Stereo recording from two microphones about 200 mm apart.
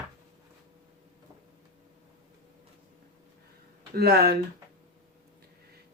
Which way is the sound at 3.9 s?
50° right (ahead or behind).